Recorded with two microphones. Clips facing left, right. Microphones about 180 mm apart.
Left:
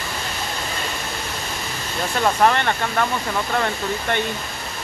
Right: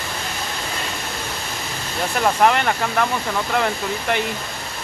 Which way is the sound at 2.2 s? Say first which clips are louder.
Right 1 dB; 5° right (ahead or behind).